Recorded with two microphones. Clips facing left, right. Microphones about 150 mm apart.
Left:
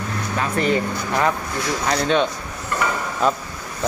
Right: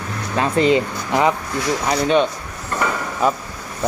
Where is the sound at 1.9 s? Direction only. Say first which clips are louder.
Right 2 dB; 5° right (ahead or behind).